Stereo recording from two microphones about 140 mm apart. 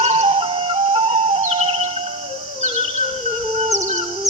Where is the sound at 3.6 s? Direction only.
55° right (ahead or behind).